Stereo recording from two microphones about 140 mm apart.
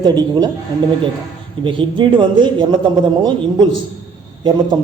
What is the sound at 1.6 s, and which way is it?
Speech, 35° right (ahead or behind).